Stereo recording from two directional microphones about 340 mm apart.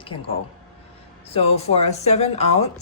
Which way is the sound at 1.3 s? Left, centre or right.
Centre.